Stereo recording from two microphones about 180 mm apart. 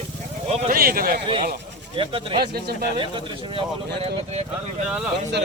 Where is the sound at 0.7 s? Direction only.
55° right (ahead or behind).